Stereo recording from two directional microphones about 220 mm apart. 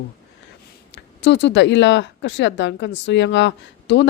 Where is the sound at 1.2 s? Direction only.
55° left (ahead or behind).